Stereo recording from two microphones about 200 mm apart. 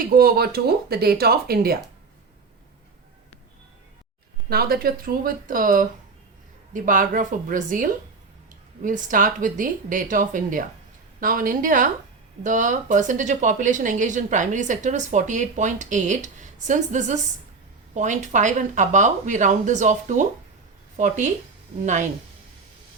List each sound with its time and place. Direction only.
0.0 s speech: 50° right (ahead or behind)
4.4 s speech: 50° right (ahead or behind)